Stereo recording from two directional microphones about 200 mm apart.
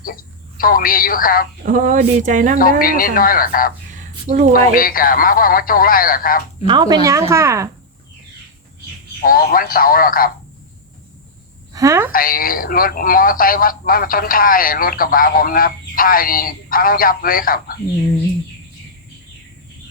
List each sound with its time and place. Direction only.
0.0 s speech: 45° left (ahead or behind)
1.6 s speech: 40° right (ahead or behind)
2.8 s a man's voice: 45° left (ahead or behind)
3.9 s a sound: 40° right (ahead or behind)
4.5 s a man's voice: 45° left (ahead or behind)
6.7 s speech: 20° right (ahead or behind)
9.2 s a man's voice: 45° left (ahead or behind)
11.7 s a woman's voice: 15° right (ahead or behind)
12.1 s a man's voice: 45° left (ahead or behind)